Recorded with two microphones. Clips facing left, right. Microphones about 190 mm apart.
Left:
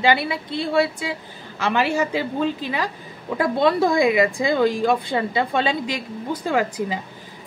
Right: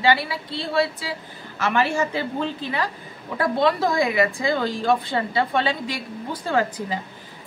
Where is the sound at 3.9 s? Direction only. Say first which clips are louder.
Left 3 dB; 20° left (ahead or behind).